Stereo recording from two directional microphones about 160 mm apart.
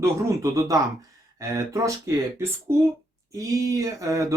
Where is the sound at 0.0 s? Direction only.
20° right (ahead or behind).